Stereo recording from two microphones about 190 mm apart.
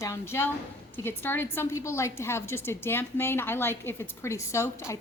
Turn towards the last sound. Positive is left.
turn(degrees=15)  # may be behind; listen again after turning